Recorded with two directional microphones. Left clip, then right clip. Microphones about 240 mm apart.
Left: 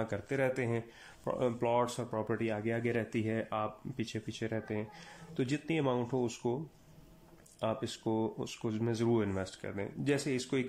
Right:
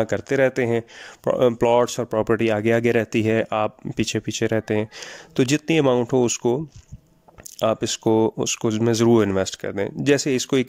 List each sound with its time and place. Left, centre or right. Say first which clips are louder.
0.0 s speech: right 14 dB; right